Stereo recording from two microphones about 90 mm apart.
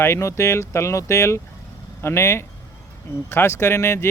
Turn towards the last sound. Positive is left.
turn(degrees=30)  # may be behind; listen again after turning